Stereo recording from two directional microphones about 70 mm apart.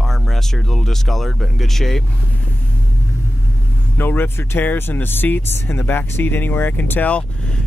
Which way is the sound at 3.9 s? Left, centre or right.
Left.